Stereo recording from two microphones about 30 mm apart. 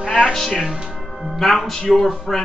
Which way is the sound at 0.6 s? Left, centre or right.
Right.